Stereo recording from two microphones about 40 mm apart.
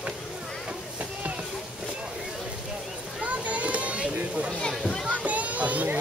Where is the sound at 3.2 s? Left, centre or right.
Right.